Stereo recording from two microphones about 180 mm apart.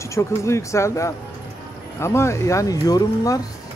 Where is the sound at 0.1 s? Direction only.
15° left (ahead or behind).